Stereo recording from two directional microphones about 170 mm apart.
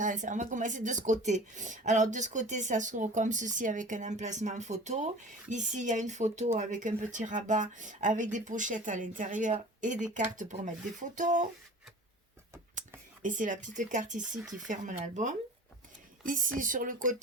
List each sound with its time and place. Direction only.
0.0 s speech: 50° right (ahead or behind)
13.2 s speech: 50° right (ahead or behind)